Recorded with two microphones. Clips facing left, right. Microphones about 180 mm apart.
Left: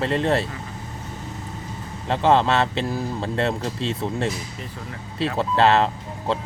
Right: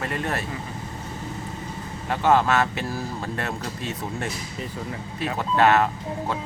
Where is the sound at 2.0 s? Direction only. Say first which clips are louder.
Left 2 dB; 25° left (ahead or behind).